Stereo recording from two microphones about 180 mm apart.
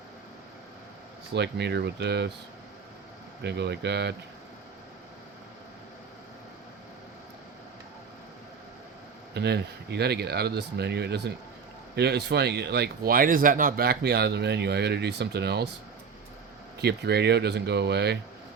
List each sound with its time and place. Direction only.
1.3 s speech: 70° right (ahead or behind)
3.4 s speech: 70° right (ahead or behind)
9.3 s speech: 65° right (ahead or behind)
16.8 s speech: 65° right (ahead or behind)